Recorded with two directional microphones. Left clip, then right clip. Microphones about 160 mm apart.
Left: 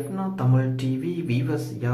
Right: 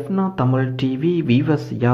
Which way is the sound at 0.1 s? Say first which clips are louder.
Right 10 dB; 40° right (ahead or behind).